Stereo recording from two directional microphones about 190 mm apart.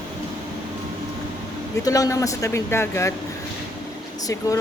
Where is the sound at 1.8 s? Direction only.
15° left (ahead or behind).